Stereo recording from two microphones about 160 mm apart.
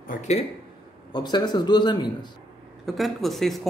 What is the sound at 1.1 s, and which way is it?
A man's voice, 25° left (ahead or behind).